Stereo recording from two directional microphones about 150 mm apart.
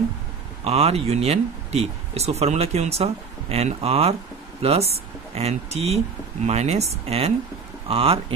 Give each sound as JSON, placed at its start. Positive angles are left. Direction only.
{"t": 0.7, "sound": "speech", "side_deg": -40}